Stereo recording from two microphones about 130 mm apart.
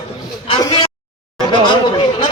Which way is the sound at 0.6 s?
35° left (ahead or behind).